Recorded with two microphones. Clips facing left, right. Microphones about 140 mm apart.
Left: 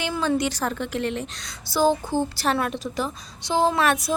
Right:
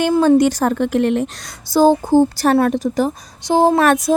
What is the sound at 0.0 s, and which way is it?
A woman's voice, 45° right (ahead or behind).